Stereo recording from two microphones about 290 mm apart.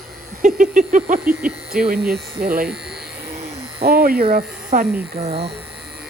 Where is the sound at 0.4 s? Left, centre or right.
Right.